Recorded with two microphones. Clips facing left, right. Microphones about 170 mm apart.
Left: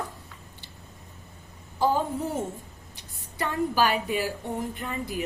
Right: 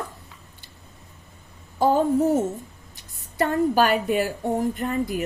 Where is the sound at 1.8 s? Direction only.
55° right (ahead or behind).